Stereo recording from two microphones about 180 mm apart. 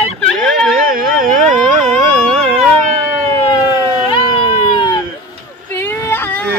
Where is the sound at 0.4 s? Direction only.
Centre (ahead or behind).